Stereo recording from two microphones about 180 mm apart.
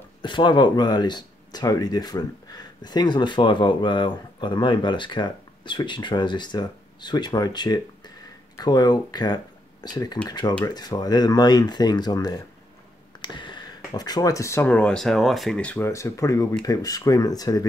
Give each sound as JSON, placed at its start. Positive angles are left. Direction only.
{"t": 0.2, "sound": "speech", "side_deg": 25}